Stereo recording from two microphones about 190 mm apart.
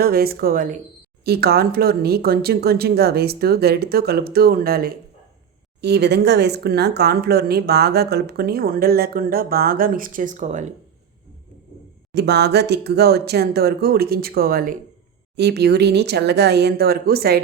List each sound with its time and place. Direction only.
0.0 s speech: 50° right (ahead or behind)
12.1 s speech: 60° right (ahead or behind)
15.4 s speech: 60° right (ahead or behind)